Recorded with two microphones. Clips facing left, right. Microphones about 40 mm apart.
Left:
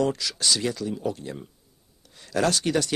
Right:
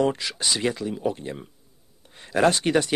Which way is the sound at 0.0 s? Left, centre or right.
Right.